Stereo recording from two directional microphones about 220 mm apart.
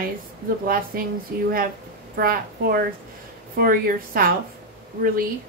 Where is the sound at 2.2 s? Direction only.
40° right (ahead or behind).